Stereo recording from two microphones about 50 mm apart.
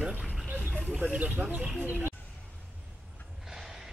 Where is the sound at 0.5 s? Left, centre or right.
Right.